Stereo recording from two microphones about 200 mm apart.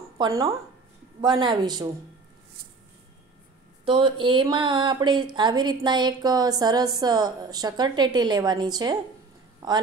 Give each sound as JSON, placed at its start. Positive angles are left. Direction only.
{"t": 0.2, "sound": "speech", "side_deg": -15}
{"t": 3.8, "sound": "a woman's voice", "side_deg": -25}